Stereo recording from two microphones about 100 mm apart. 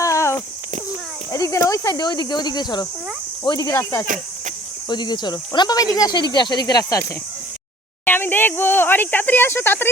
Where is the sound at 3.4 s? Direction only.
45° left (ahead or behind).